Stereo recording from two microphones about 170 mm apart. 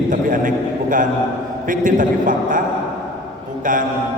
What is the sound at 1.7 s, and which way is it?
Speech, 50° right (ahead or behind).